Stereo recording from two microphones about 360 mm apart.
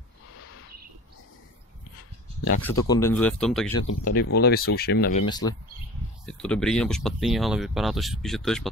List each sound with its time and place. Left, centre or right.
0.4 s a sound: left
2.6 s speech: centre
3.8 s speech: left
5.2 s speech: centre